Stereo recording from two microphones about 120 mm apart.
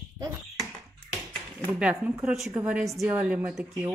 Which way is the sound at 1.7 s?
10° right (ahead or behind).